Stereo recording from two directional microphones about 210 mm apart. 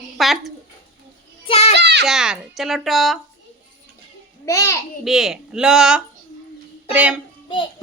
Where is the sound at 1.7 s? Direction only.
55° right (ahead or behind).